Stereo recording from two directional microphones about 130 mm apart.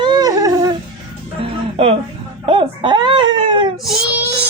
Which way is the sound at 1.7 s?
50° right (ahead or behind).